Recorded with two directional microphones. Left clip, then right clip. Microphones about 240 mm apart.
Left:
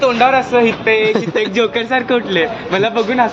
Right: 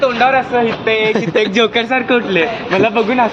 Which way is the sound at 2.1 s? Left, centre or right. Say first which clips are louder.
Right 1 dB; right.